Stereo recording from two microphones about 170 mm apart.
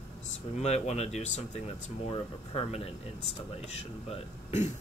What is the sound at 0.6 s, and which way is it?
Speech, 40° left (ahead or behind).